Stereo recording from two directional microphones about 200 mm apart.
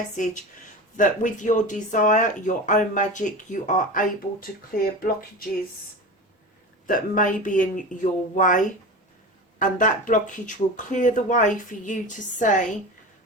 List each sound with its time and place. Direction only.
0.2 s speech: 40° left (ahead or behind)
6.8 s speech: 45° left (ahead or behind)